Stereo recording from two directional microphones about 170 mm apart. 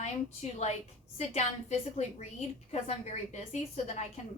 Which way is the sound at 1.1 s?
40° left (ahead or behind).